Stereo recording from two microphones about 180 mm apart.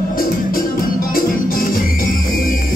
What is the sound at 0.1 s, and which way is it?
Music, 50° left (ahead or behind).